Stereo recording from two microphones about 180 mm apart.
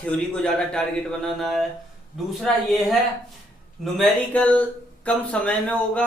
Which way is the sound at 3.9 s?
5° left (ahead or behind).